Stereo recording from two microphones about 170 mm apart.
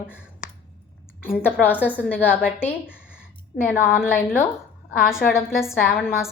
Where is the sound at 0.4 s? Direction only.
50° left (ahead or behind).